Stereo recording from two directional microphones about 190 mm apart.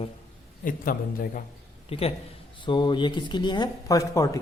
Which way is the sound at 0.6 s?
45° left (ahead or behind).